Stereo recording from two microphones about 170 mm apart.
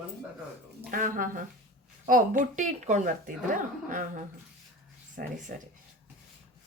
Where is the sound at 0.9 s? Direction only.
55° right (ahead or behind).